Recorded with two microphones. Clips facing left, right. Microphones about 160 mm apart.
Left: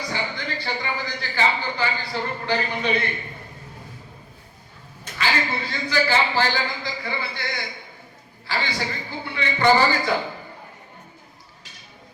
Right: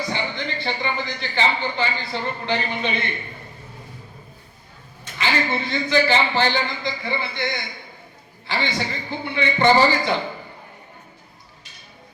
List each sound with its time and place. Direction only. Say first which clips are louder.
0.1 s speech: right 2 dB; 20° right (ahead or behind)
5.1 s speech: right 2 dB; 20° right (ahead or behind)
8.4 s speech: right 2 dB; 20° right (ahead or behind)